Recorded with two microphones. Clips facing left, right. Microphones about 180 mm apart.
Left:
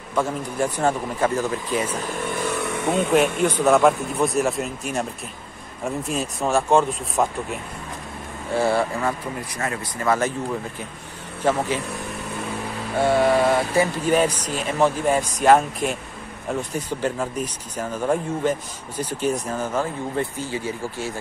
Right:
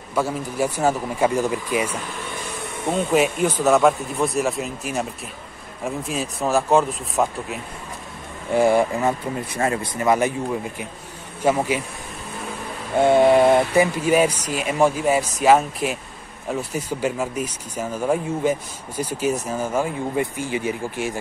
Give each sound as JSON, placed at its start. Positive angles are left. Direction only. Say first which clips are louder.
{"t": 0.1, "sound": "speech", "louder": "even", "side_deg": -5}
{"t": 2.4, "sound": "vehicle", "louder": "left 5 dB", "side_deg": 70}
{"t": 3.2, "sound": "speech", "louder": "even", "side_deg": -5}
{"t": 8.5, "sound": "speech", "louder": "right 4 dB", "side_deg": -15}
{"t": 11.4, "sound": "speech", "louder": "right 2 dB", "side_deg": -10}
{"t": 13.0, "sound": "speech", "louder": "right 4 dB", "side_deg": -20}